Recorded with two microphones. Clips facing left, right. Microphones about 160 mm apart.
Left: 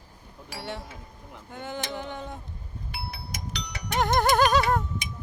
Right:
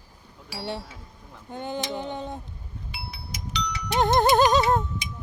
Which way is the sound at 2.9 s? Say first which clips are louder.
Left 2 dB; 55° left (ahead or behind).